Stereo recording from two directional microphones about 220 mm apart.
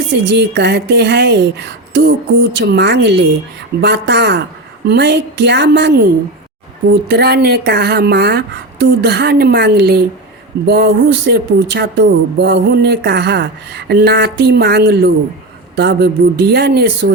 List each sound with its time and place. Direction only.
0.1 s speech: 50° right (ahead or behind)
7.1 s speech: 45° right (ahead or behind)